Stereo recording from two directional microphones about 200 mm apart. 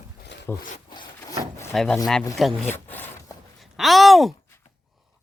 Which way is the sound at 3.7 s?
Centre (ahead or behind).